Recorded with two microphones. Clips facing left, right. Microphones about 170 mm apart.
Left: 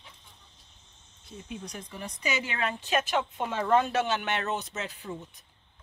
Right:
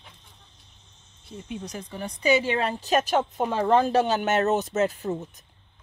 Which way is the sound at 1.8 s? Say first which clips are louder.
Right 11 dB; 30° right (ahead or behind).